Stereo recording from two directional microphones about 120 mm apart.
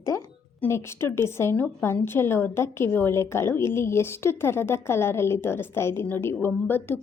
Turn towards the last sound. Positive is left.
turn(degrees=15)  # may be behind; listen again after turning